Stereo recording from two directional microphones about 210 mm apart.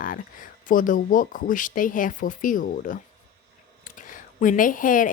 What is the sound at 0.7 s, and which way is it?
A woman's voice, 40° left (ahead or behind).